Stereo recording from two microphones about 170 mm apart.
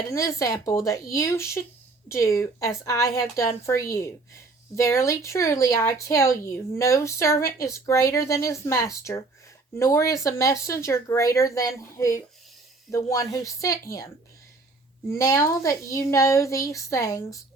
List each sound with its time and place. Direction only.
0.1 s a child's voice: 20° left (ahead or behind)